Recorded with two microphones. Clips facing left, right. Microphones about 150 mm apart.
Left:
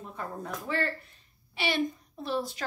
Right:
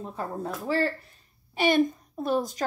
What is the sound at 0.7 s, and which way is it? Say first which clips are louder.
A woman's voice: right 5 dB; 35° right (ahead or behind).